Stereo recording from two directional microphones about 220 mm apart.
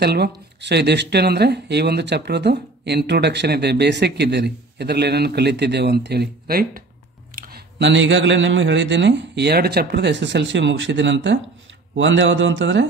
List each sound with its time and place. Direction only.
0.0 s speech: 50° right (ahead or behind)